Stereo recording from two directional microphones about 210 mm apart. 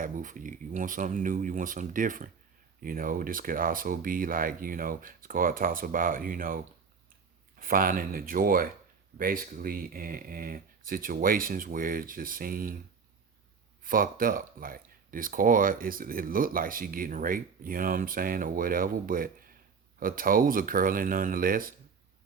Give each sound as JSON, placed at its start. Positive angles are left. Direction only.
{"t": 0.0, "sound": "speech", "side_deg": -40}
{"t": 13.8, "sound": "speech", "side_deg": -40}